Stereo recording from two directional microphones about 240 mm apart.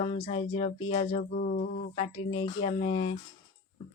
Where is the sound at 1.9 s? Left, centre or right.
Left.